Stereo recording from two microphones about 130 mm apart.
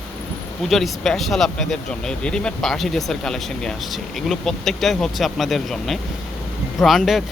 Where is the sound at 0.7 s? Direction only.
Centre (ahead or behind).